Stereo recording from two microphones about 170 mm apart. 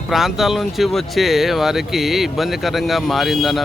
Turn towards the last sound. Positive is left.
turn(degrees=0)  # may be behind; listen again after turning